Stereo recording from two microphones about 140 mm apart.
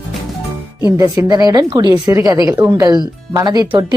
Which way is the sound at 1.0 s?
25° right (ahead or behind).